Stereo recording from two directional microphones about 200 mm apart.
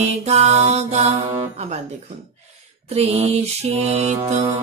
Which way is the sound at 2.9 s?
30° right (ahead or behind).